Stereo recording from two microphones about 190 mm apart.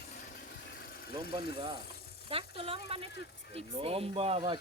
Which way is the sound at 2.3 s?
30° right (ahead or behind).